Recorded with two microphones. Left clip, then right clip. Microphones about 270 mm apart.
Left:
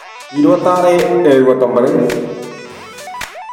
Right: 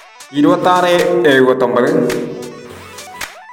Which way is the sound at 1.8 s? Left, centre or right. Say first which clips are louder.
Left 1 dB; centre.